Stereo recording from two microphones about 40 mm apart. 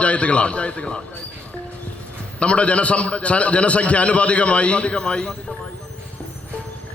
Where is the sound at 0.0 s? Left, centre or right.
Left.